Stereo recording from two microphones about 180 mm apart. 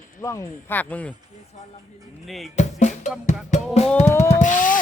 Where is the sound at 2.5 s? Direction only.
40° left (ahead or behind).